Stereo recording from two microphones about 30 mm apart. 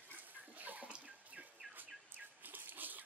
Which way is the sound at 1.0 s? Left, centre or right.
Right.